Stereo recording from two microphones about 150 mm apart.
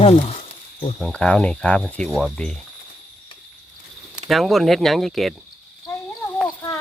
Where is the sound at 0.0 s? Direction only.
40° left (ahead or behind).